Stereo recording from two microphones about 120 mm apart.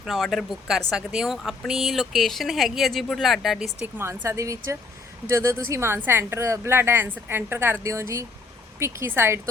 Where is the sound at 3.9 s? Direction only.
20° right (ahead or behind).